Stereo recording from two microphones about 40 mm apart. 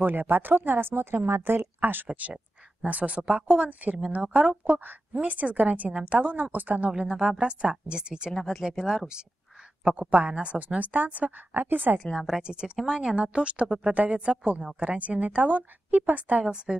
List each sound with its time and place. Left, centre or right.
0.0 s a woman's voice: right
2.9 s a woman's voice: right
4.7 s a woman's voice: right
6.3 s speech: right
6.9 s a woman's voice: centre; by 11.4 s right
11.5 s speech: right
12.3 s a woman's voice: right
16.4 s a woman's voice: right